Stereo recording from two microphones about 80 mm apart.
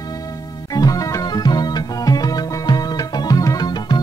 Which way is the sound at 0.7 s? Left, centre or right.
Left.